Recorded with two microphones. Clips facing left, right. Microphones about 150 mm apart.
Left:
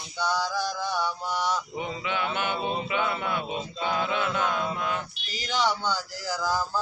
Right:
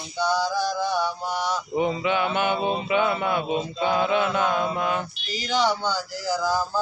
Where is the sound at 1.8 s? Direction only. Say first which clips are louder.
Right 8 dB; 15° right (ahead or behind).